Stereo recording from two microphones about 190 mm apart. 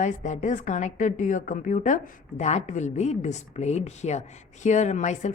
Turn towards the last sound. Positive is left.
turn(degrees=40)  # may be behind; listen again after turning